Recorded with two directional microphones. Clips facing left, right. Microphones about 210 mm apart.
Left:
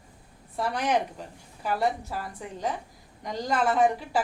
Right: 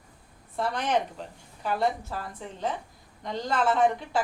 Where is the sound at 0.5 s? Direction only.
10° left (ahead or behind).